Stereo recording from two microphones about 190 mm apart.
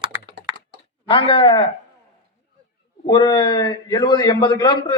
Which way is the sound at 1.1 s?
30° left (ahead or behind).